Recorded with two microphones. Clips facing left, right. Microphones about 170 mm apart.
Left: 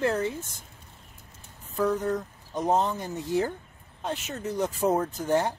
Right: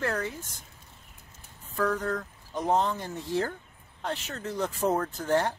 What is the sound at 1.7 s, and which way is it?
Speech, 20° left (ahead or behind).